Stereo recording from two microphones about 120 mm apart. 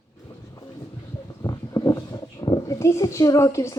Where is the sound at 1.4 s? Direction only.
30° left (ahead or behind).